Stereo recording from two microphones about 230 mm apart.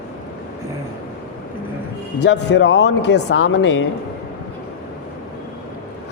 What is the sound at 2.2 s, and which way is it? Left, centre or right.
Speech, left.